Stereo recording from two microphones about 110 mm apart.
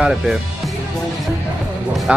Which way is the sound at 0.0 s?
5° right (ahead or behind).